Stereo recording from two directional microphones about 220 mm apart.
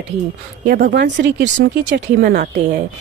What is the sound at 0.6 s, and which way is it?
Speech, 40° right (ahead or behind).